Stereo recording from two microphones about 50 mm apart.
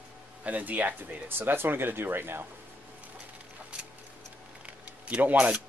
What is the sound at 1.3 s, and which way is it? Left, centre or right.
Speech, right.